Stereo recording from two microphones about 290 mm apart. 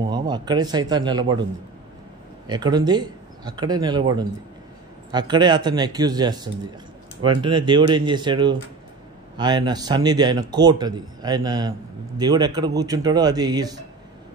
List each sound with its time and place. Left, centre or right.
0.0 s speech: centre
2.4 s a man's voice: centre